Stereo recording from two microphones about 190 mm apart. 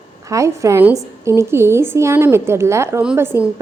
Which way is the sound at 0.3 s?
15° right (ahead or behind).